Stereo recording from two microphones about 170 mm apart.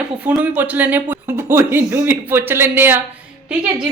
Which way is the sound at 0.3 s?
10° right (ahead or behind).